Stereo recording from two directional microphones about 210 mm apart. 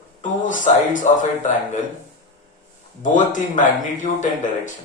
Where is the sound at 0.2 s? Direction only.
35° left (ahead or behind).